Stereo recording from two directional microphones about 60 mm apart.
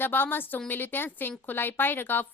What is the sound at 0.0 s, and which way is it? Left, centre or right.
A woman's voice, left.